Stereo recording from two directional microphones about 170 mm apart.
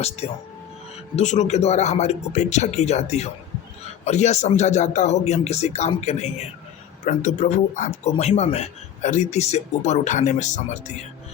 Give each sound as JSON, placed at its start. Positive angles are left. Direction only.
{"t": 1.1, "sound": "speech", "side_deg": 45}